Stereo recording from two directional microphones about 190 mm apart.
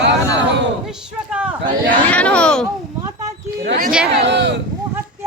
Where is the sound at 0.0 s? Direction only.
70° right (ahead or behind).